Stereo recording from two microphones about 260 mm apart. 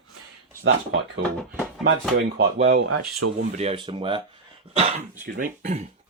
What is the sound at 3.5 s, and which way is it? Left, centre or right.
Speech, right.